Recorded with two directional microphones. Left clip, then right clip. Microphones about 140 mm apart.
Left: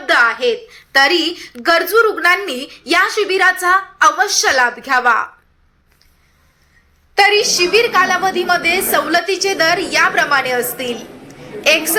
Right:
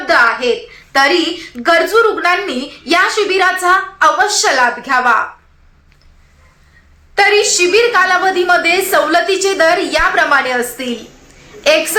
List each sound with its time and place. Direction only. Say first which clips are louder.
0.1 s a child's voice: right 2 dB; 20° left (ahead or behind)
7.2 s a woman's voice: right 1 dB; 10° left (ahead or behind)